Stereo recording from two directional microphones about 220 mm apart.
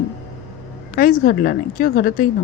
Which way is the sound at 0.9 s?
40° left (ahead or behind).